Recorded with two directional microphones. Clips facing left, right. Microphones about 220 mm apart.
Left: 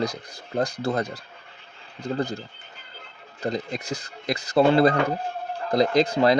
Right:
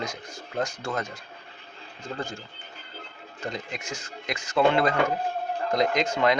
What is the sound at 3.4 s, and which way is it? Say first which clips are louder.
Speech: left 6 dB; 35° left (ahead or behind).